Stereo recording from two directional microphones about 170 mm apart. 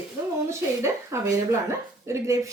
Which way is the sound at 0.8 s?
15° right (ahead or behind).